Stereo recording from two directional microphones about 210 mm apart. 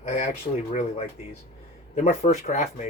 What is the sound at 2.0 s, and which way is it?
Speech, 35° left (ahead or behind).